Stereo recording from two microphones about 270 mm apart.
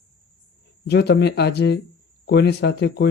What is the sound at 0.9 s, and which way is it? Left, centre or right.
Speech, left.